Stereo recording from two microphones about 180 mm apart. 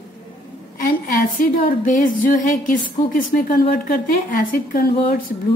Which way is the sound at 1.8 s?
45° left (ahead or behind).